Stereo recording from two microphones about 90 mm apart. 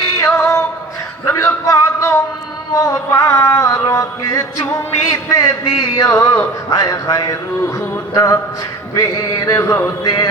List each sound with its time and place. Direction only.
0.0 s music: 35° left (ahead or behind)
1.3 s a sound: 35° left (ahead or behind)
2.7 s music: 40° left (ahead or behind)